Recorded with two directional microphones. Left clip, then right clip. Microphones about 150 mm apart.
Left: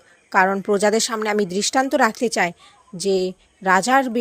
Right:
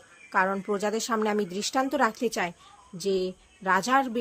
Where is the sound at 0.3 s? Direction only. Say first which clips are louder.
Left 8 dB; 35° left (ahead or behind).